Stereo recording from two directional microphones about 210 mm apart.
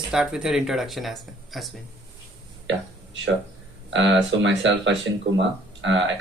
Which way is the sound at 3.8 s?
60° right (ahead or behind).